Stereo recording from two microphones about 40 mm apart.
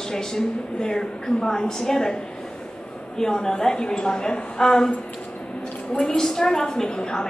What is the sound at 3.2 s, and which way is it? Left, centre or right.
A woman's voice, centre.